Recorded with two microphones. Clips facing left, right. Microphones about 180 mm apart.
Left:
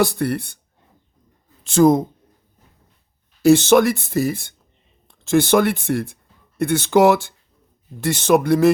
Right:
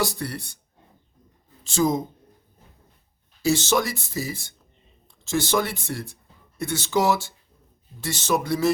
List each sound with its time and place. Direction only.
0.0 s speech: 55° left (ahead or behind)
1.6 s speech: 55° left (ahead or behind)
3.4 s speech: 60° left (ahead or behind)